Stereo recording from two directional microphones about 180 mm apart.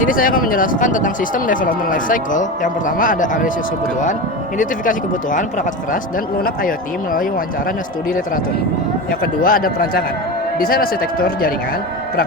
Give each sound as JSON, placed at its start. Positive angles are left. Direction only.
{"t": 0.0, "sound": "speech", "side_deg": 50}
{"t": 4.5, "sound": "speech", "side_deg": 45}
{"t": 9.4, "sound": "speech", "side_deg": 55}